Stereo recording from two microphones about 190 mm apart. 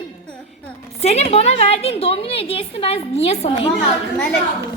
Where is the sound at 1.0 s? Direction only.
35° left (ahead or behind).